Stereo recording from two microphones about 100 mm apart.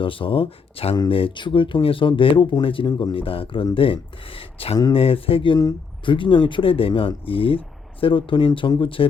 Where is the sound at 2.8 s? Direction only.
50° left (ahead or behind).